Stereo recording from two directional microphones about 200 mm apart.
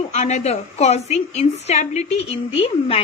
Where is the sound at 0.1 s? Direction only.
35° left (ahead or behind).